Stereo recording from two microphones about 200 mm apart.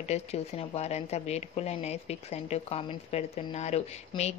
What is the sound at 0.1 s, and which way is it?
Speech, 30° left (ahead or behind).